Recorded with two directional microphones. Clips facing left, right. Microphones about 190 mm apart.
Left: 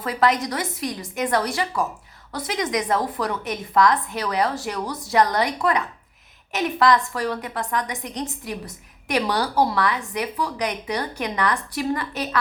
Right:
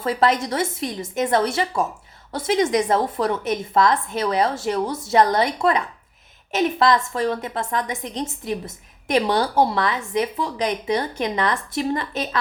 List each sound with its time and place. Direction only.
0.0 s a woman's voice: 25° right (ahead or behind)